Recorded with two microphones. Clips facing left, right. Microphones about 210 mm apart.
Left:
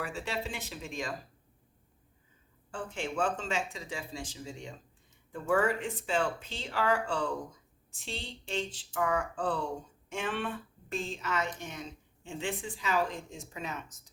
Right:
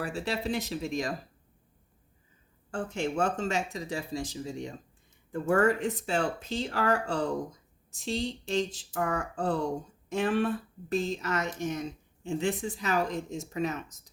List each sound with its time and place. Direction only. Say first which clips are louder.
0.0 s speech: right 4 dB; 35° right (ahead or behind)
2.7 s speech: right 4 dB; 45° right (ahead or behind)